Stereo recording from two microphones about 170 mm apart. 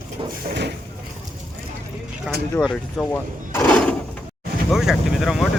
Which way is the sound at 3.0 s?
15° left (ahead or behind).